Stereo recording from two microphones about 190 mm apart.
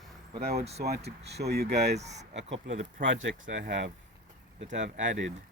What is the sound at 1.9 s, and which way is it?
Speech, 35° right (ahead or behind).